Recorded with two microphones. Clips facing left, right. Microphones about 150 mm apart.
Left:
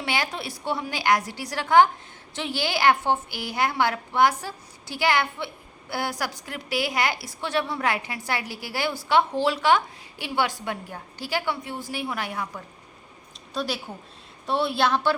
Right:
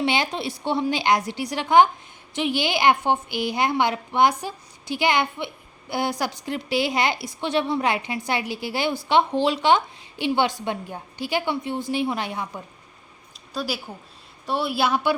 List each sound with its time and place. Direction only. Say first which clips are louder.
0.0 s a woman's voice: right 5 dB; 20° right (ahead or behind)
13.5 s a woman's voice: even; 5° right (ahead or behind)